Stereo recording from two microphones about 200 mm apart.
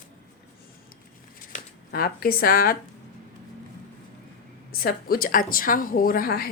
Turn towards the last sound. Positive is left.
turn(degrees=50)  # may be behind; listen again after turning